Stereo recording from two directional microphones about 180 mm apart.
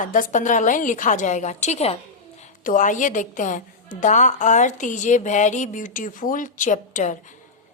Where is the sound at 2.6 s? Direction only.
50° left (ahead or behind).